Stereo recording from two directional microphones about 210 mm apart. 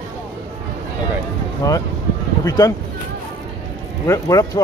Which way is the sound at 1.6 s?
15° left (ahead or behind).